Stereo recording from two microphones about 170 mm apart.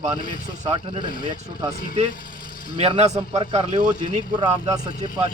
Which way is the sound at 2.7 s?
35° right (ahead or behind).